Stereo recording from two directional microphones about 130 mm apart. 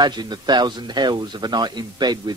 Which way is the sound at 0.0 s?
35° right (ahead or behind).